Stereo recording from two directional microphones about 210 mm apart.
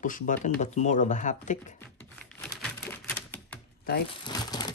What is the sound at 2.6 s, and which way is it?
Typewriter, 5° left (ahead or behind).